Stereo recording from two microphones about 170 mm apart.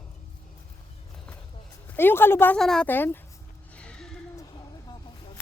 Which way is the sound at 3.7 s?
5° left (ahead or behind).